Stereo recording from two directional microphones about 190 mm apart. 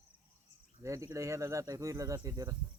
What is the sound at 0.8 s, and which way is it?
Speech, 15° right (ahead or behind).